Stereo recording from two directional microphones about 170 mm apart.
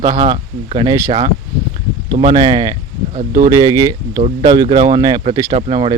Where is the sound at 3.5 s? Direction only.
20° right (ahead or behind).